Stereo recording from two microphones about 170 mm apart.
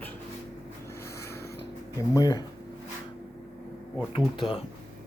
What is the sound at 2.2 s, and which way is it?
Speech, 25° left (ahead or behind).